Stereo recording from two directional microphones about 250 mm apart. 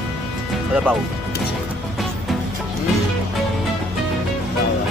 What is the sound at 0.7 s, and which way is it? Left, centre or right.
Speech, centre.